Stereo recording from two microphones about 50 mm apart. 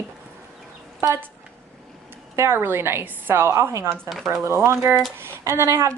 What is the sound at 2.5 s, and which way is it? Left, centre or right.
Speech, right.